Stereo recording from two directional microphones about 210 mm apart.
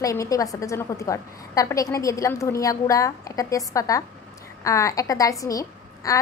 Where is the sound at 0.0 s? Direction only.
15° left (ahead or behind).